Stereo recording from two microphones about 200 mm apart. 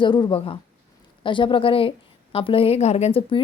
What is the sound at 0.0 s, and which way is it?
A woman's voice, 20° left (ahead or behind).